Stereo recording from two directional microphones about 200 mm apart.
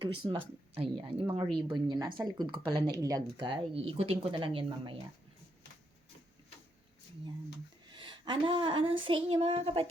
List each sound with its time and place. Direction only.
0.0 s speech: 25° right (ahead or behind)
7.9 s child singing: 25° right (ahead or behind)